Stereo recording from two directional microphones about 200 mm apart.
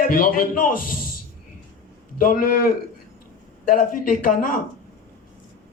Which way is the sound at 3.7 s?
45° left (ahead or behind).